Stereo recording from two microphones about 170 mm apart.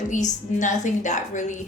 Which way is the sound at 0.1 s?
45° left (ahead or behind).